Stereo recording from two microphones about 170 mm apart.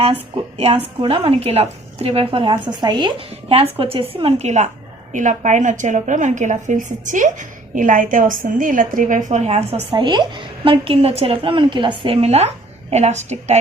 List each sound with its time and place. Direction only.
0.0 s a woman's voice: 35° right (ahead or behind)